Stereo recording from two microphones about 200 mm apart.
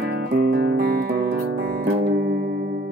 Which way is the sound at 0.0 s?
50° right (ahead or behind).